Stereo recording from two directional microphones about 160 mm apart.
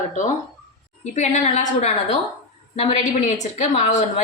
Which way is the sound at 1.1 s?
45° left (ahead or behind).